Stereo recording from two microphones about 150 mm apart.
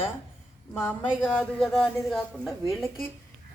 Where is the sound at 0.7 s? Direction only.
15° left (ahead or behind).